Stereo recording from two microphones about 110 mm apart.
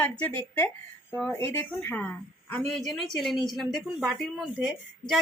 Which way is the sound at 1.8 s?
20° left (ahead or behind).